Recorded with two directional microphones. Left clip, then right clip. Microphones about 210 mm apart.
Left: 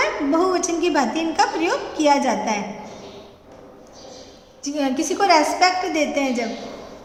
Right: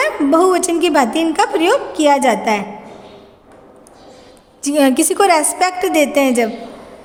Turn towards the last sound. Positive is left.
turn(degrees=-55)  # may be behind; listen again after turning